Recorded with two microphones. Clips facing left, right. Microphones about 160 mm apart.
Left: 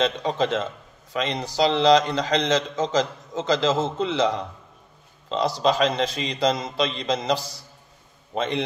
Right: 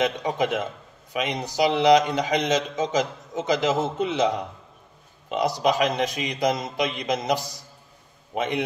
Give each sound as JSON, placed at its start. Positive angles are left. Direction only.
{"t": 0.0, "sound": "a man's voice", "side_deg": -15}